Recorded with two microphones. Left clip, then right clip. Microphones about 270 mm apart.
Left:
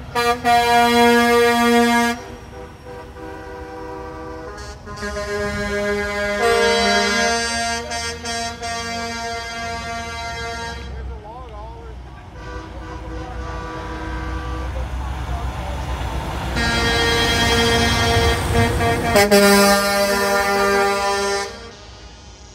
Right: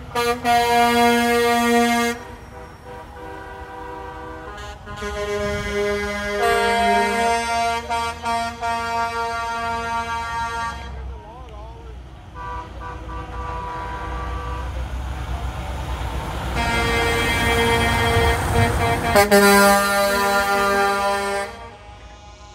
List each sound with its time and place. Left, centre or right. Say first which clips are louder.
0.1 s vehicle: left 2 dB; centre
5.0 s music: even; left
6.4 s music: left 1 dB; right; by 9.9 s centre
15.1 s vehicle: left 2 dB; centre
16.5 s vehicle: left 2 dB; centre
17.9 s music: left 1 dB; right
19.1 s vehicle: even; centre
19.8 s music: left 1 dB; right